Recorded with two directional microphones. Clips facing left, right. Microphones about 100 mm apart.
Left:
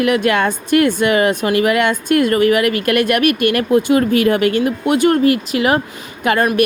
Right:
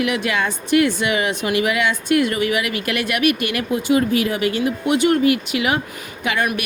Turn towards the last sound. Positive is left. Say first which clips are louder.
# left 6 dB
turn(degrees=45)  # may be behind; listen again after turning